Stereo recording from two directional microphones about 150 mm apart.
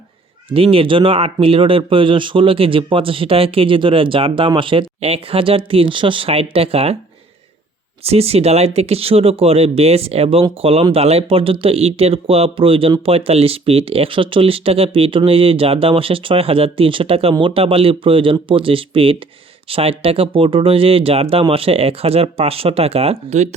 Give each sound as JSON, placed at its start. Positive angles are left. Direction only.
{"t": 0.5, "sound": "speech", "side_deg": -40}
{"t": 8.0, "sound": "speech", "side_deg": -45}